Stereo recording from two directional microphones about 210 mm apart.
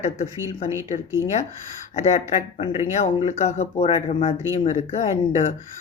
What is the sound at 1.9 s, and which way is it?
Speech, 35° left (ahead or behind).